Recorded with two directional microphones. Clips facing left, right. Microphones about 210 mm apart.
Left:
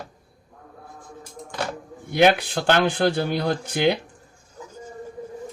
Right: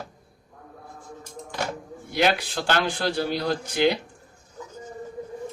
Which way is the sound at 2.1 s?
55° left (ahead or behind).